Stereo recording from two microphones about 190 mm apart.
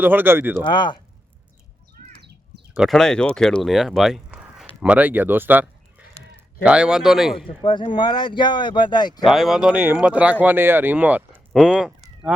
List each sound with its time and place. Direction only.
0.0 s speech: 10° right (ahead or behind)
0.6 s speech: 25° left (ahead or behind)
2.0 s bird: 40° right (ahead or behind)
2.7 s speech: centre (ahead or behind)
7.4 s speech: 25° left (ahead or behind)
9.2 s speech: centre (ahead or behind)
11.5 s honk: 5° right (ahead or behind)